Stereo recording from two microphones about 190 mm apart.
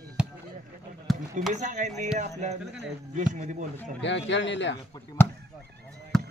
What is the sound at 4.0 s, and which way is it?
Speech, 70° left (ahead or behind).